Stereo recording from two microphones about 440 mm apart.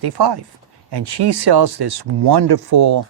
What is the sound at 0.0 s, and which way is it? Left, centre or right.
Speech, right.